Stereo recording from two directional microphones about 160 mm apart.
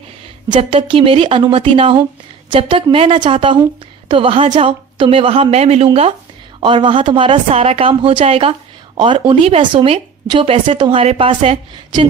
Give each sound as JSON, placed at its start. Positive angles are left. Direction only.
{"t": 0.5, "sound": "speech", "side_deg": -35}